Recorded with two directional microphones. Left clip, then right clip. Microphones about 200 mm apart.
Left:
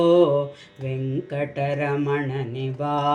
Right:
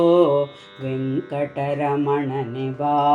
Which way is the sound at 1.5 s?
5° right (ahead or behind).